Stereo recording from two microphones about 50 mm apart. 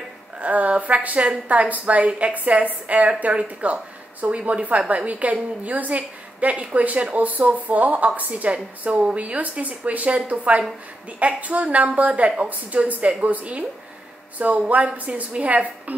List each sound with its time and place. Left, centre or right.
0.4 s a woman's voice: right